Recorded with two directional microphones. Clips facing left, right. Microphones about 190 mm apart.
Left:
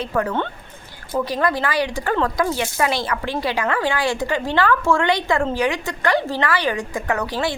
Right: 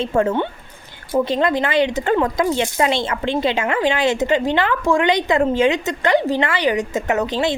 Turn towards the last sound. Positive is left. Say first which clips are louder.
# right 3 dB
turn(degrees=-20)  # may be behind; listen again after turning